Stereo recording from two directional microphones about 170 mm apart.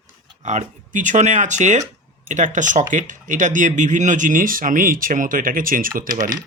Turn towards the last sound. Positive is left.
turn(degrees=-50)  # may be behind; listen again after turning